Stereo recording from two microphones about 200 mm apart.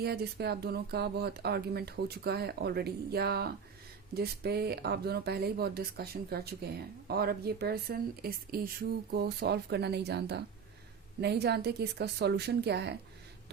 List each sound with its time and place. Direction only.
0.0 s a woman's voice: 55° right (ahead or behind)